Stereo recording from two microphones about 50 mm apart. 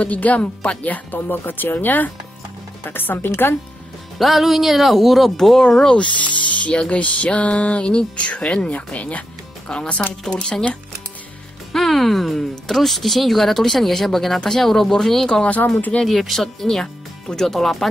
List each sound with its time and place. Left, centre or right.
0.0 s speech: left
1.2 s speech: left
4.2 s speech: centre
5.6 s speech: centre
6.3 s speech: left; by 10.6 s centre
11.7 s speech: centre
16.8 s music: centre
17.5 s speech: centre